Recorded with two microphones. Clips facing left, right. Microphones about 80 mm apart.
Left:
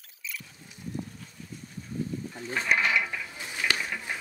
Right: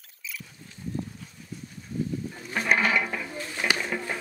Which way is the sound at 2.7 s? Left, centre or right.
Right.